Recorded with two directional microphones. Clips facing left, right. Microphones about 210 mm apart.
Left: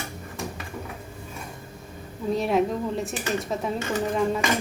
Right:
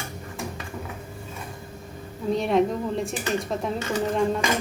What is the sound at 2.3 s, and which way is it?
Speech, centre (ahead or behind).